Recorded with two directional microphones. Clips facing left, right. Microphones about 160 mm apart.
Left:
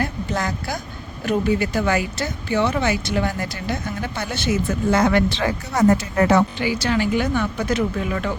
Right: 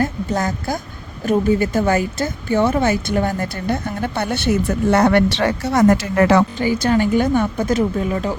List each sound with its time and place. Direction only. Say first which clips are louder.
0.0 s a sound: right 4 dB; 45° right (ahead or behind)
1.2 s a woman's voice: right 4 dB; 45° right (ahead or behind); by 6.4 s 90° right
6.6 s a woman's voice: right 4 dB; 45° right (ahead or behind)